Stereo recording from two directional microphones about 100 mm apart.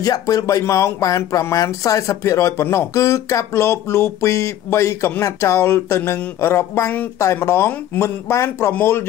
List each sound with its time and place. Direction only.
0.0 s speech: 35° left (ahead or behind)